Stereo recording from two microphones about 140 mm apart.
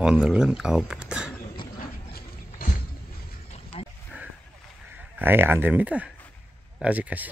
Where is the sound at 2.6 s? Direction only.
90° left.